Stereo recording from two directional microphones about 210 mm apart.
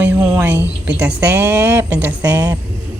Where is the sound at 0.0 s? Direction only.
10° right (ahead or behind).